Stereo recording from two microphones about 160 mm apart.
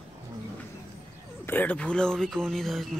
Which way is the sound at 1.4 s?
10° left (ahead or behind).